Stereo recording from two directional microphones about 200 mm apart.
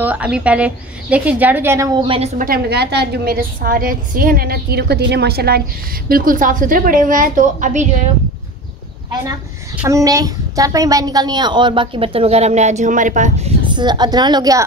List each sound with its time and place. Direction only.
0.0 s a woman's voice: 5° right (ahead or behind)
2.0 s a woman's voice: 30° right (ahead or behind)
2.3 s a woman's voice: 45° right (ahead or behind)
9.8 s a woman's voice: 15° right (ahead or behind); by 13.5 s 40° right (ahead or behind)
13.7 s a woman's voice: 20° right (ahead or behind)